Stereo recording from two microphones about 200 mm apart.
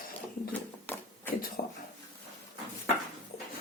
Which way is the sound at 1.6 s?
50° left (ahead or behind).